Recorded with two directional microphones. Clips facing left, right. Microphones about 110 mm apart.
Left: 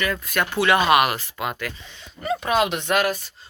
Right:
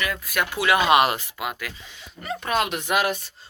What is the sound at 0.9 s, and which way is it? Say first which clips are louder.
Speech: even; 25° right (ahead or behind).